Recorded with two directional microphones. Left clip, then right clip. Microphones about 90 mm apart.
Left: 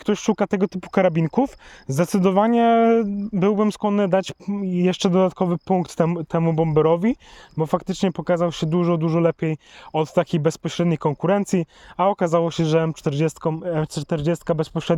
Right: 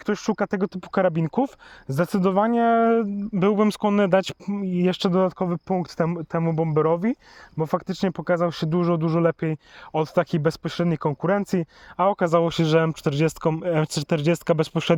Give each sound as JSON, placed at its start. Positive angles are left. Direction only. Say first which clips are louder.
{"t": 0.0, "sound": "speech", "louder": "left 3 dB", "side_deg": 90}
{"t": 1.9, "sound": "speech", "louder": "left 2 dB", "side_deg": 65}
{"t": 3.3, "sound": "speech", "louder": "left 1 dB", "side_deg": 30}
{"t": 3.6, "sound": "speech", "louder": "even", "side_deg": 10}
{"t": 4.9, "sound": "speech", "louder": "left 3 dB", "side_deg": 55}
{"t": 6.1, "sound": "speech", "louder": "left 3 dB", "side_deg": 90}
{"t": 7.6, "sound": "speech", "louder": "left 2 dB", "side_deg": 65}
{"t": 11.9, "sound": "speech", "louder": "left 1 dB", "side_deg": 35}
{"t": 12.3, "sound": "speech", "louder": "even", "side_deg": 15}
{"t": 13.4, "sound": "speech", "louder": "right 1 dB", "side_deg": 0}